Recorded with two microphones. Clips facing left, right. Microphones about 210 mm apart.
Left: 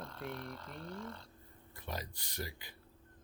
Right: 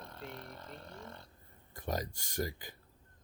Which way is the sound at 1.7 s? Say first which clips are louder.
Right 6 dB; 45° right (ahead or behind).